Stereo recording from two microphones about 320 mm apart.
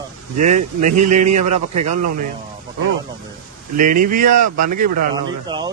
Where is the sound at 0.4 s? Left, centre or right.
Right.